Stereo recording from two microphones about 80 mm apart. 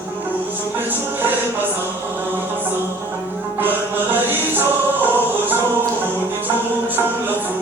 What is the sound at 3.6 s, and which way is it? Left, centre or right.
Music, right.